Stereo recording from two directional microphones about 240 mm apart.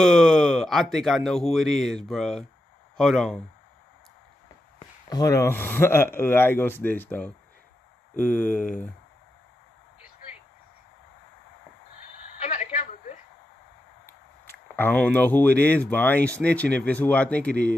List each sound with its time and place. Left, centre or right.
0.0 s speech: centre
4.7 s speech: centre
12.4 s telephone: left
14.0 s speech: centre